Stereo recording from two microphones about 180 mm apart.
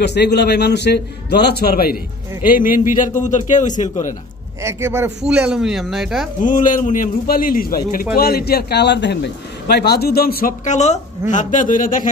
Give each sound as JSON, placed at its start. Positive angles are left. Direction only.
{"t": 0.0, "sound": "a man's voice", "side_deg": 70}
{"t": 4.6, "sound": "speech", "side_deg": -15}
{"t": 6.4, "sound": "a man's voice", "side_deg": 45}